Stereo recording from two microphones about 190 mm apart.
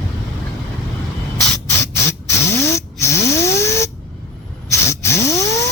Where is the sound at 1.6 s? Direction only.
15° left (ahead or behind).